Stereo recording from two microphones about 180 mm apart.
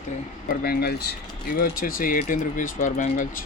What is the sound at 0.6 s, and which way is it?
Speech, 60° left (ahead or behind).